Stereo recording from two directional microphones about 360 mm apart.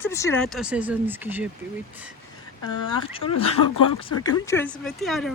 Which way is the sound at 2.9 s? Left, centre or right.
Centre.